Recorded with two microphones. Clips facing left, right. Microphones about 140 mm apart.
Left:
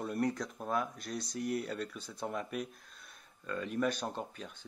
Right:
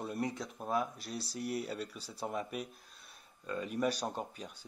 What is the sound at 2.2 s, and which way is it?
Speech, 5° right (ahead or behind).